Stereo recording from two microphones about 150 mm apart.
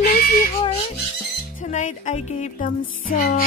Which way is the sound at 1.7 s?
50° left (ahead or behind).